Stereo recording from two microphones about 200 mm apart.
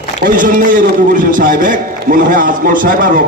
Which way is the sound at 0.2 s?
45° right (ahead or behind).